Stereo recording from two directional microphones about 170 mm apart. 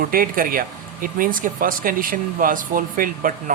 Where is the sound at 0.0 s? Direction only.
55° right (ahead or behind).